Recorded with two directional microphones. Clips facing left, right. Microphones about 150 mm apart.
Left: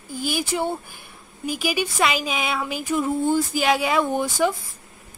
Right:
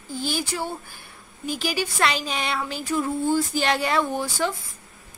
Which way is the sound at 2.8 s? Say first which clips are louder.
Left 3 dB; 20° left (ahead or behind).